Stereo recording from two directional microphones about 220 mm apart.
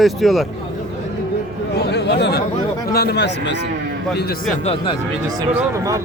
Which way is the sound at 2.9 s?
45° left (ahead or behind).